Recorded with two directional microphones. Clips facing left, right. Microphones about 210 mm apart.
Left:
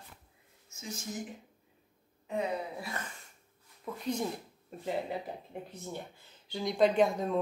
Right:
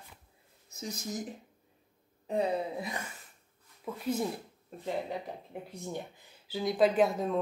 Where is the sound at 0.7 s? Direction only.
35° right (ahead or behind).